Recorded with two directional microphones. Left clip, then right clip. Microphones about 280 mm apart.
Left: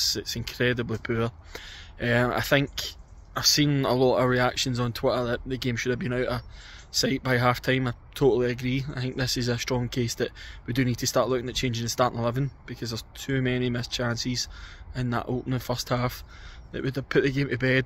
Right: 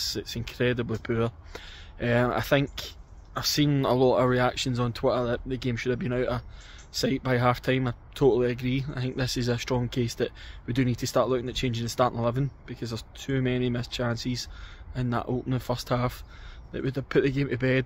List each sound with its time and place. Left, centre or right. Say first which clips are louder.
0.0 s speech: left 4 dB; centre